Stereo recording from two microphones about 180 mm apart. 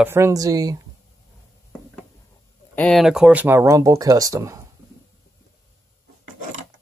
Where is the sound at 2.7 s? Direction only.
5° left (ahead or behind); by 4.6 s 15° right (ahead or behind).